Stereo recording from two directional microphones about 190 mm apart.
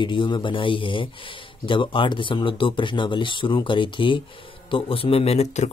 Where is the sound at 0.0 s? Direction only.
25° left (ahead or behind).